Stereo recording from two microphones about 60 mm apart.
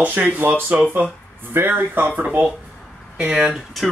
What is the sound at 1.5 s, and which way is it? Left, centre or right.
Speech, right.